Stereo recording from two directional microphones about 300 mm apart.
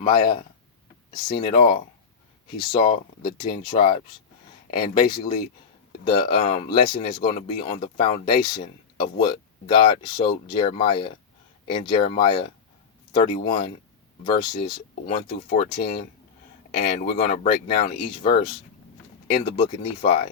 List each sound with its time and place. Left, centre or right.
0.0 s speech: centre
6.1 s speech: centre
6.7 s speech: left
7.3 s speech: centre
8.3 s speech: left
8.5 s speech: centre
19.5 s speech: centre